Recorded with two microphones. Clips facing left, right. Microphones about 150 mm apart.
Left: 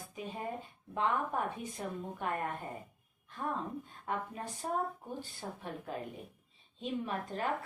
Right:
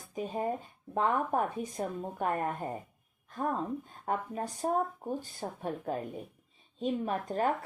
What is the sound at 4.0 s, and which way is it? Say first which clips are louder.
A woman's voice: right 4 dB; 45° right (ahead or behind).